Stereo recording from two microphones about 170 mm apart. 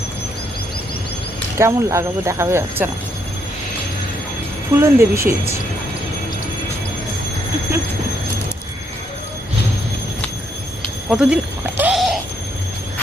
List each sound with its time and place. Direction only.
1.5 s speech: 15° right (ahead or behind)
4.8 s speech: 15° right (ahead or behind)
11.1 s speech: 5° right (ahead or behind)
11.8 s a sound: 5° right (ahead or behind)